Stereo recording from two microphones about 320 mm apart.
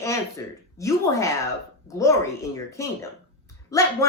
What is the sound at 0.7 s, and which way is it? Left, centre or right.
Speech, centre.